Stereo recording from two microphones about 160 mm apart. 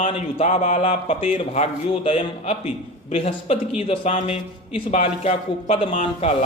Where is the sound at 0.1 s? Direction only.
35° left (ahead or behind).